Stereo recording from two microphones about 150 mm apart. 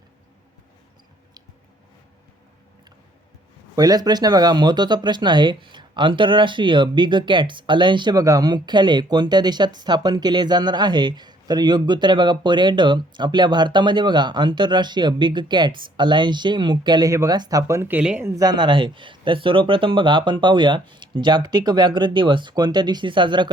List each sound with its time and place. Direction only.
3.8 s speech: 25° right (ahead or behind); by 18.3 s 10° right (ahead or behind)
18.3 s speech: 25° right (ahead or behind)